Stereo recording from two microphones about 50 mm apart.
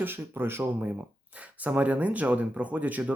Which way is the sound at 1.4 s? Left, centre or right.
Right.